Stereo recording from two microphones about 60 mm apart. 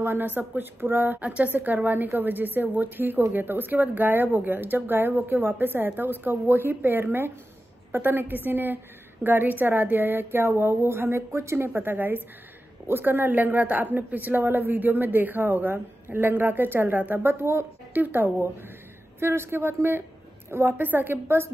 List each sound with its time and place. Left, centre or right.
0.0 s a man's voice: right
1.2 s a woman's voice: right
17.9 s a man's voice: right